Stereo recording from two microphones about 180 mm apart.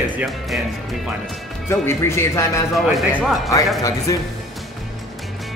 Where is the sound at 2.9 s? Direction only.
Centre (ahead or behind).